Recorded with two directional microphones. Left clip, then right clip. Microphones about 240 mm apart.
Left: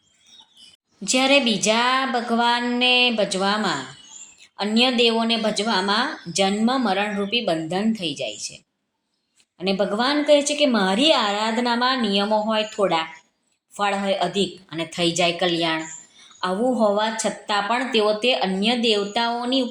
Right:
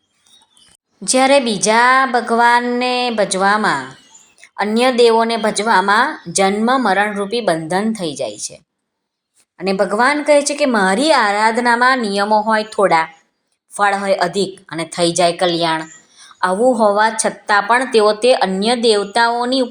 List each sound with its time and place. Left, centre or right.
1.0 s a woman's voice: right
9.6 s a woman's voice: right
10.1 s a woman's voice: right
10.7 s a woman's voice: right